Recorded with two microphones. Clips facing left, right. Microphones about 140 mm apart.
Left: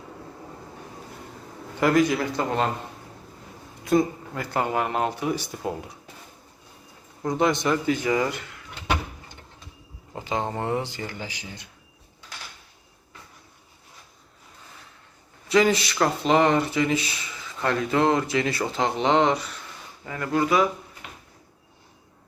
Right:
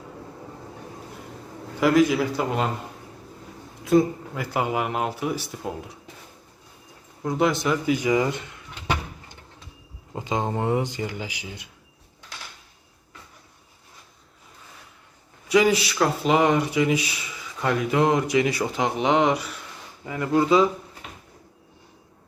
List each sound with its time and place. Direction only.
1.8 s speech: centre (ahead or behind)
3.8 s speech: 5° right (ahead or behind)
7.2 s speech: 5° right (ahead or behind); by 8.6 s 20° right (ahead or behind)
10.2 s speech: 20° right (ahead or behind)
15.4 s speech: 10° right (ahead or behind)